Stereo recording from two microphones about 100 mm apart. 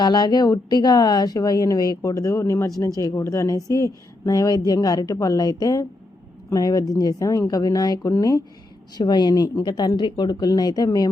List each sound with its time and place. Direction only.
0.0 s a woman's voice: 45° left (ahead or behind)
9.0 s speech: 45° left (ahead or behind)